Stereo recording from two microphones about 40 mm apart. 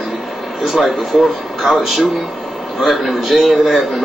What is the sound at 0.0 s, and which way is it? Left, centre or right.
A man's voice, centre.